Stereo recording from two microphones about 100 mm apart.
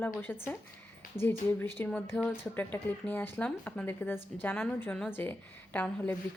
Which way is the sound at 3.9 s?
20° left (ahead or behind).